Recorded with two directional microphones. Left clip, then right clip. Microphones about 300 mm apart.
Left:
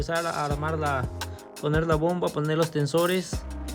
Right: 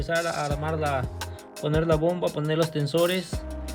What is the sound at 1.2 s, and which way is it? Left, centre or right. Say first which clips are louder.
Music: even; centre.